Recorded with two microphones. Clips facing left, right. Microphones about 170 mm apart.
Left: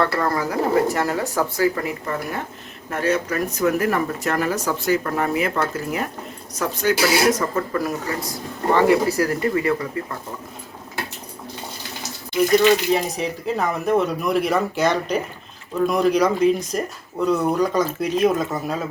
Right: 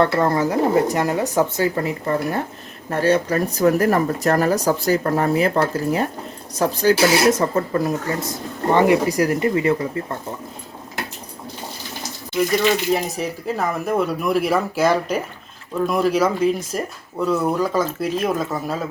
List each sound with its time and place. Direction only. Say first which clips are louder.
0.0 s speech: right 4 dB; 25° right (ahead or behind)
12.9 s speech: even; centre (ahead or behind)